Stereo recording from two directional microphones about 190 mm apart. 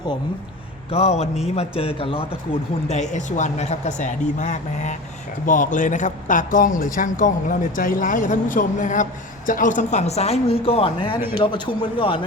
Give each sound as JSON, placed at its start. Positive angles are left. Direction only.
{"t": 0.9, "sound": "a man's voice", "side_deg": 35}